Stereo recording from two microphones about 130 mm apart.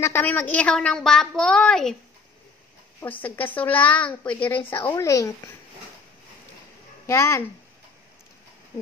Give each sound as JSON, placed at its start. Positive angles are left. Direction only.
{"t": 0.0, "sound": "a woman's voice", "side_deg": 15}
{"t": 3.0, "sound": "speech", "side_deg": 15}
{"t": 7.1, "sound": "speech", "side_deg": 20}